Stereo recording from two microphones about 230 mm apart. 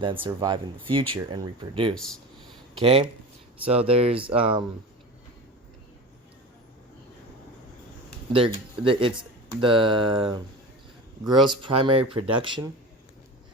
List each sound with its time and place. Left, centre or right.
0.0 s speech: right
8.3 s speech: right
11.4 s speech: right